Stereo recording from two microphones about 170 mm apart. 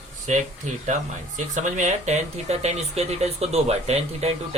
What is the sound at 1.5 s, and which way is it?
Speech, 45° right (ahead or behind).